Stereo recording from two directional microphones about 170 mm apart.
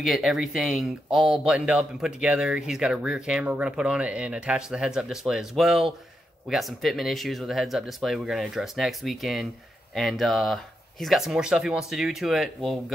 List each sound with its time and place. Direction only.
0.0 s speech: centre (ahead or behind)